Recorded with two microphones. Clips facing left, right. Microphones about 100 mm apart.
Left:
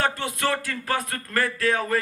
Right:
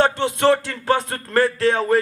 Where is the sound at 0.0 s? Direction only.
25° right (ahead or behind).